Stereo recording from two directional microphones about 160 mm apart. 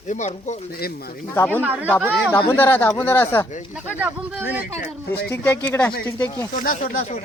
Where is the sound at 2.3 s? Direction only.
15° left (ahead or behind).